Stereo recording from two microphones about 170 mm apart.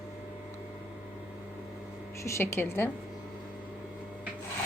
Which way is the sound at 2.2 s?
15° left (ahead or behind).